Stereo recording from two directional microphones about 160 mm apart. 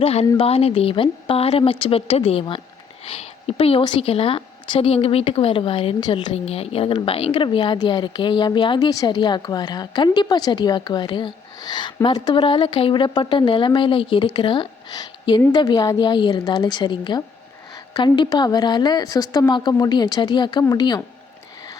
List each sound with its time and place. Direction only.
0.0 s a woman's voice: 40° left (ahead or behind)